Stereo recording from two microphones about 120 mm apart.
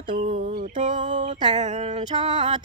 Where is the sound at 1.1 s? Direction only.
90° right.